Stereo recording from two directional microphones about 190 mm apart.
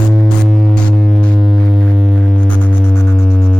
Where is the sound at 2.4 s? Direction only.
10° left (ahead or behind).